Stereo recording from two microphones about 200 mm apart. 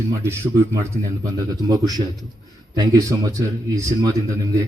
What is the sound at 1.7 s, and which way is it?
Speech, 20° right (ahead or behind).